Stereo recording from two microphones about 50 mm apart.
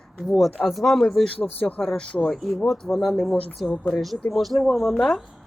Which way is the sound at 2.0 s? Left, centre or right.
Centre.